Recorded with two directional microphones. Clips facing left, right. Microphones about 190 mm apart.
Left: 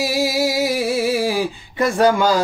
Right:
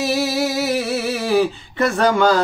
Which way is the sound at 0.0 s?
10° left (ahead or behind).